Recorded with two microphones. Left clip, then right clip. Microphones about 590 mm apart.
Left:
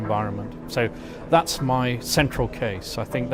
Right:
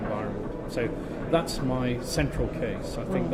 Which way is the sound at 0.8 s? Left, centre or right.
Left.